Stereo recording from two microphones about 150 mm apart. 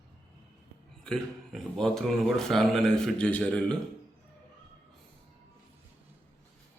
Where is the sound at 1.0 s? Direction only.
5° left (ahead or behind).